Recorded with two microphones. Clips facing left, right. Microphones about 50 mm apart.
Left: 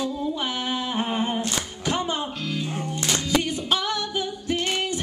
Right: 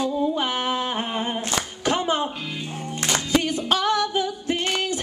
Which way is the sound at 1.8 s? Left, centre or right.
Right.